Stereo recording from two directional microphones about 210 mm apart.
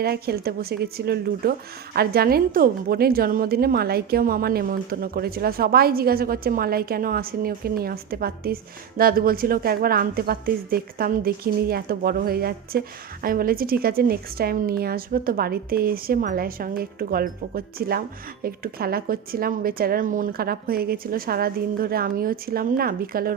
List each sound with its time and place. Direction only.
0.0 s speech: 50° right (ahead or behind)